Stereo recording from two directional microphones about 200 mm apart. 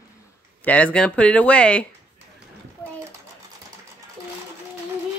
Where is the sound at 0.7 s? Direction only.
5° left (ahead or behind).